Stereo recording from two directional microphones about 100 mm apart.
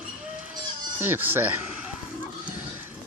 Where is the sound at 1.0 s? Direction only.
20° right (ahead or behind).